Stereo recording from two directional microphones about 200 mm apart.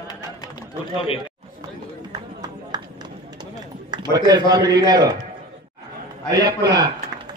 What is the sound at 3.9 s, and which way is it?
A man's voice, 20° right (ahead or behind).